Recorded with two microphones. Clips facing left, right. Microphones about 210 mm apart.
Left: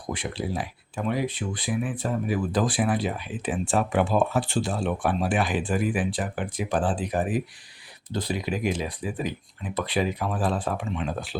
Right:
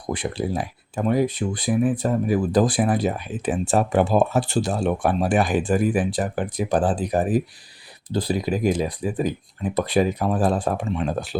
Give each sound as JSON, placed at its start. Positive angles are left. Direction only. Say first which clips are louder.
{"t": 0.1, "sound": "speech", "louder": "right 5 dB", "side_deg": -45}